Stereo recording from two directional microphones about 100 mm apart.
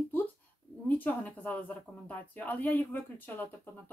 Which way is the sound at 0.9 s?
15° left (ahead or behind).